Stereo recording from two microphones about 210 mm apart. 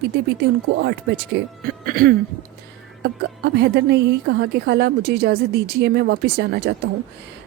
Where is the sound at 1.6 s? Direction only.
45° right (ahead or behind).